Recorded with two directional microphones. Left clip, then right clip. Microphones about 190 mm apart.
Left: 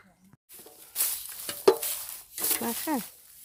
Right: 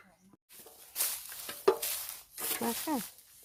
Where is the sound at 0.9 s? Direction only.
30° left (ahead or behind).